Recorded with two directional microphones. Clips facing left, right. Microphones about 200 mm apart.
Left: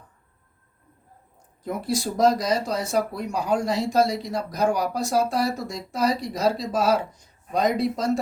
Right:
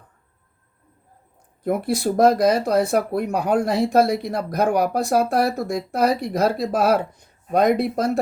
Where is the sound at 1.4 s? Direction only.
60° right (ahead or behind).